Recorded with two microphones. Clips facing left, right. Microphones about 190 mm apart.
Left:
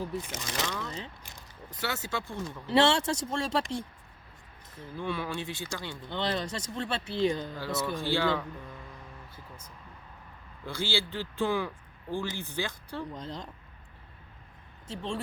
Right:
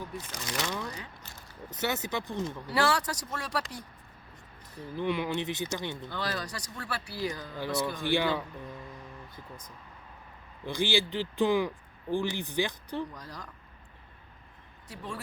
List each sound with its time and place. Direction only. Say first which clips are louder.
0.0 s speech: left 4 dB; 25° left (ahead or behind)
1.7 s speech: right 2 dB; 20° right (ahead or behind)
2.6 s speech: left 5 dB; 25° left (ahead or behind)
4.9 s speech: right 4 dB; 20° right (ahead or behind)
6.1 s speech: left 8 dB; 25° left (ahead or behind)
7.9 s speech: left 1 dB; 15° right (ahead or behind)
10.7 s speech: right 4 dB; 15° right (ahead or behind)
13.1 s speech: left 5 dB; 25° left (ahead or behind)
14.8 s speech: left 5 dB; 25° left (ahead or behind)